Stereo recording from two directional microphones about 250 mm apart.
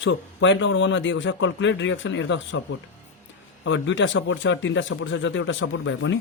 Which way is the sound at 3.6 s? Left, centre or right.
Left.